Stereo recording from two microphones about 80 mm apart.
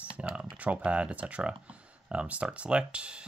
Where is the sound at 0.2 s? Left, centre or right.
Centre.